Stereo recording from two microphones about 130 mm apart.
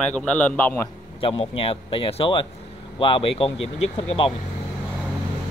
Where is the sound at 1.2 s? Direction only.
45° left (ahead or behind).